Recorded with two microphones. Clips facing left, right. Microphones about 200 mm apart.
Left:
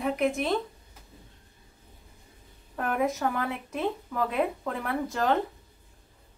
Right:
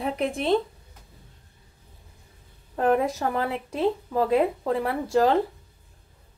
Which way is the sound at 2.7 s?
30° right (ahead or behind).